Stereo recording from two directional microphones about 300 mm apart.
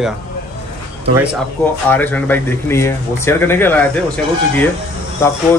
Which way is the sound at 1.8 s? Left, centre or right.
Centre.